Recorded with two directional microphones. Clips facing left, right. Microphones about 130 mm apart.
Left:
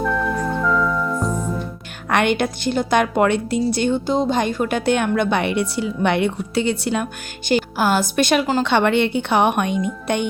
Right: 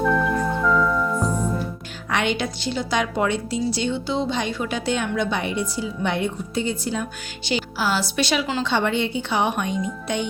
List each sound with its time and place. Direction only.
0.0 s music: centre (ahead or behind)
2.0 s speech: 55° left (ahead or behind)
8.6 s speech: 65° left (ahead or behind)